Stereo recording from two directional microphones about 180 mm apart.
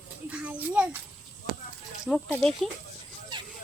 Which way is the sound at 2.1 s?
5° left (ahead or behind).